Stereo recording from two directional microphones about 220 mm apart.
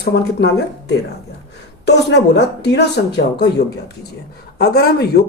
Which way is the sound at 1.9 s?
50° left (ahead or behind).